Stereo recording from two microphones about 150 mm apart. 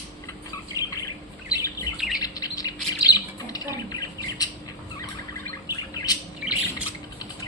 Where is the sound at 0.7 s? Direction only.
20° left (ahead or behind).